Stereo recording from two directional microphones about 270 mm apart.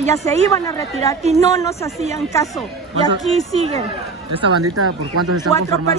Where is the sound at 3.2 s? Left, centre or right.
Centre.